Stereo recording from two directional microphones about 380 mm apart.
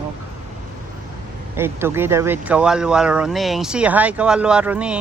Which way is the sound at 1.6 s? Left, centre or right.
Centre.